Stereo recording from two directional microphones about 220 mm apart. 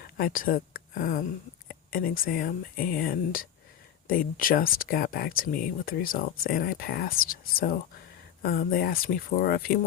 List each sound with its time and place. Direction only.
0.2 s speech: 40° left (ahead or behind)